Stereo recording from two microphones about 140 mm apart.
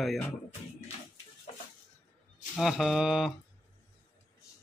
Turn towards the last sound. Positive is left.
turn(degrees=0)  # may be behind; listen again after turning